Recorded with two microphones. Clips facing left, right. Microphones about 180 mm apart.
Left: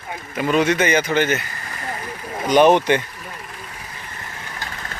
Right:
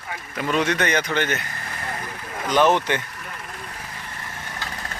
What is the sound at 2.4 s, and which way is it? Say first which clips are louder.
Speech: left 5 dB; 15° left (ahead or behind).